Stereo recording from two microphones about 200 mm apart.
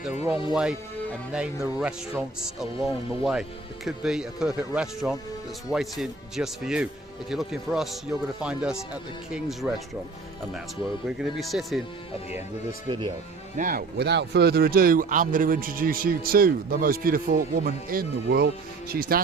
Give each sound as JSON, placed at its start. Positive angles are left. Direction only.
{"t": 0.0, "sound": "speech", "side_deg": -10}
{"t": 11.2, "sound": "speech", "side_deg": 0}
{"t": 12.9, "sound": "speech", "side_deg": -20}
{"t": 13.6, "sound": "speech", "side_deg": -45}